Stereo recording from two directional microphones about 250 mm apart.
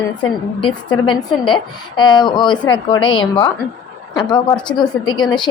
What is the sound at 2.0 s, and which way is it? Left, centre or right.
A woman's voice, centre.